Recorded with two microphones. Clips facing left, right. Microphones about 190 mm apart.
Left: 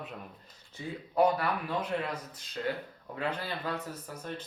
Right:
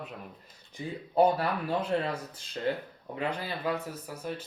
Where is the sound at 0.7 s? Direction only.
15° right (ahead or behind).